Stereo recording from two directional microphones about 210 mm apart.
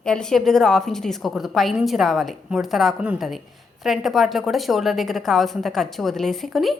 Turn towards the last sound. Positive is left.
turn(degrees=0)  # may be behind; listen again after turning